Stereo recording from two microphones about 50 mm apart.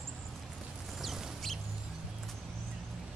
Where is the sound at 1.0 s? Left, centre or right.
Centre.